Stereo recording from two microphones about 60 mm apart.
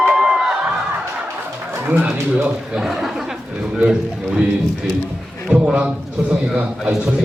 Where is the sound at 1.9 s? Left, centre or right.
Right.